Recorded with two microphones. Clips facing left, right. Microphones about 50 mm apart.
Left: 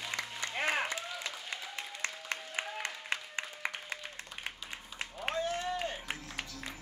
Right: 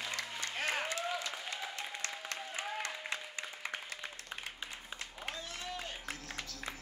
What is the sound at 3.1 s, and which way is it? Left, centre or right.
Music, left.